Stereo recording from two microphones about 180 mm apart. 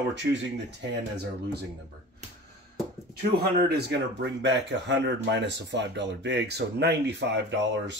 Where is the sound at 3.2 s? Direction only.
65° right (ahead or behind).